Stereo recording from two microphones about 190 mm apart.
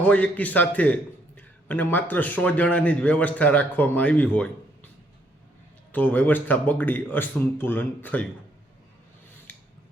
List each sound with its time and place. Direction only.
0.0 s speech: 5° left (ahead or behind)
5.9 s speech: 10° left (ahead or behind)